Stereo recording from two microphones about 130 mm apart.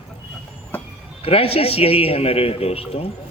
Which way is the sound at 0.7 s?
15° left (ahead or behind).